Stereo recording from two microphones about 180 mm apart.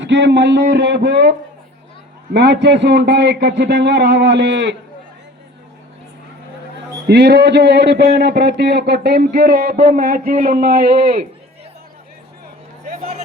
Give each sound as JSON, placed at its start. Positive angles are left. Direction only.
{"t": 0.0, "sound": "a man's voice", "side_deg": -90}
{"t": 7.1, "sound": "a man's voice", "side_deg": -65}
{"t": 12.8, "sound": "a sound", "side_deg": -40}